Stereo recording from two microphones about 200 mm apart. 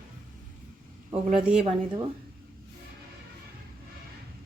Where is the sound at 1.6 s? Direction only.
25° right (ahead or behind).